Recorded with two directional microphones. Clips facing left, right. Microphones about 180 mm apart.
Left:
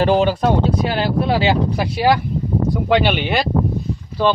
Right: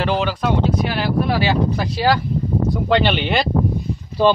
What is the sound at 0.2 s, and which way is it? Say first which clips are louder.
Speech: left 4 dB; 45° left (ahead or behind).